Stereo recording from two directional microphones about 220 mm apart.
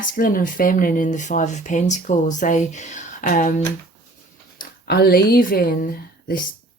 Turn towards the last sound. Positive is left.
turn(degrees=40)  # may be behind; listen again after turning